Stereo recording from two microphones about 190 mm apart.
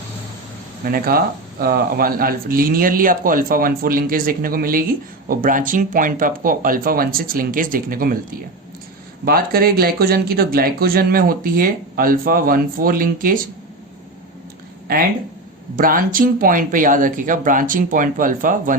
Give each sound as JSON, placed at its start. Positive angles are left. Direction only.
{"t": 0.9, "sound": "speech", "side_deg": -50}
{"t": 15.8, "sound": "speech", "side_deg": -45}